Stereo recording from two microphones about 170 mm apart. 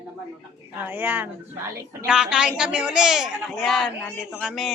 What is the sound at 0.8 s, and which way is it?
A woman's voice, 10° right (ahead or behind).